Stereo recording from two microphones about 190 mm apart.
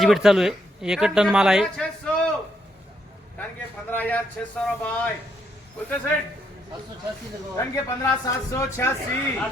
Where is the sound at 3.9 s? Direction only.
10° left (ahead or behind).